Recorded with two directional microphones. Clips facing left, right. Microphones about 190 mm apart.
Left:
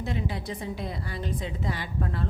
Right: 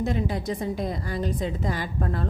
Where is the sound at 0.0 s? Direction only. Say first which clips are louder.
Right 5 dB; 45° right (ahead or behind).